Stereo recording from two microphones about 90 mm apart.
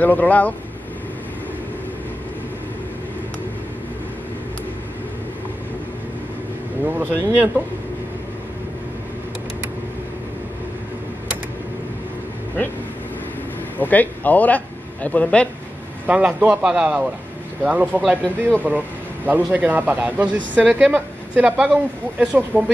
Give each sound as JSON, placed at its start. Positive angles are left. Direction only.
{"t": 0.0, "sound": "speech", "side_deg": 20}
{"t": 6.8, "sound": "speech", "side_deg": -20}
{"t": 13.7, "sound": "a man's voice", "side_deg": 20}
{"t": 16.1, "sound": "speech", "side_deg": -15}